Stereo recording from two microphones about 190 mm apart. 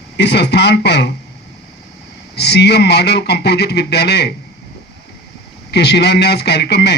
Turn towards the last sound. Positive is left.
turn(degrees=60)  # may be behind; listen again after turning